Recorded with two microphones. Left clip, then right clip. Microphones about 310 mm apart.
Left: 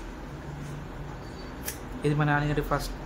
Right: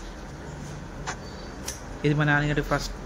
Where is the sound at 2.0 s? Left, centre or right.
Centre.